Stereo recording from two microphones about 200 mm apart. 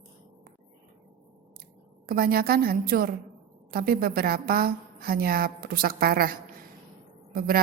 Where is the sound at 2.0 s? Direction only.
50° right (ahead or behind).